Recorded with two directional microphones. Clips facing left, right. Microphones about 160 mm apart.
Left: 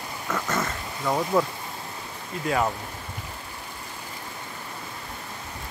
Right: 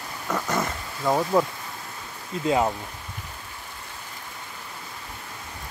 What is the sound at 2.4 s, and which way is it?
Speech, 20° right (ahead or behind).